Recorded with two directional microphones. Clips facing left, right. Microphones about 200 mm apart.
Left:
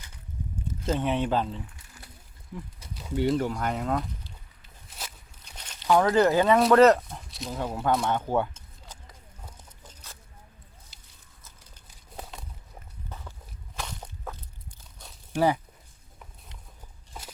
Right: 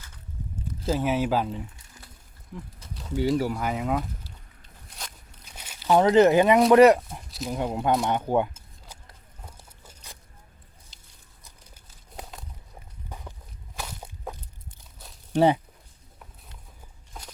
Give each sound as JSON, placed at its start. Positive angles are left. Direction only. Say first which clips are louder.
{"t": 0.9, "sound": "speech", "louder": "right 2 dB", "side_deg": -5}
{"t": 2.5, "sound": "speech", "louder": "even", "side_deg": 0}
{"t": 4.9, "sound": "walk", "louder": "even", "side_deg": 5}
{"t": 5.5, "sound": "walk", "louder": "right 1 dB", "side_deg": -10}
{"t": 5.9, "sound": "speech", "louder": "right 3 dB", "side_deg": -20}
{"t": 7.3, "sound": "snake", "louder": "right 5 dB", "side_deg": 0}
{"t": 7.5, "sound": "speech", "louder": "right 2 dB", "side_deg": -20}
{"t": 8.0, "sound": "a sound", "louder": "right 2 dB", "side_deg": -15}
{"t": 13.1, "sound": "walk", "louder": "right 2 dB", "side_deg": -15}
{"t": 13.7, "sound": "a sound", "louder": "even", "side_deg": -10}
{"t": 15.4, "sound": "speech", "louder": "right 4 dB", "side_deg": -25}